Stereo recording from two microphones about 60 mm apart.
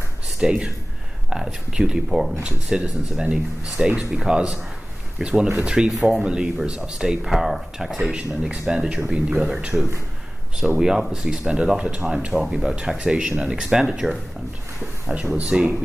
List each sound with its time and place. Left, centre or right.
0.4 s speech: centre
2.4 s speech: centre
8.2 s speech: centre
10.8 s speech: centre
15.3 s speech: centre